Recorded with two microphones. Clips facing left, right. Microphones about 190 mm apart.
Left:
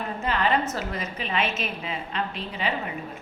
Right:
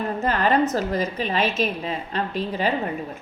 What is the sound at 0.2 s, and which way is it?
A woman's voice, 40° right (ahead or behind).